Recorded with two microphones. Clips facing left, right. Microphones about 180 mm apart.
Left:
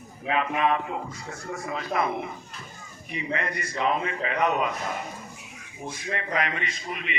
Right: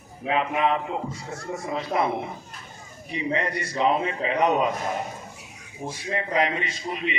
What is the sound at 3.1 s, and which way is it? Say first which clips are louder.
A man's voice: right 4 dB; 30° right (ahead or behind).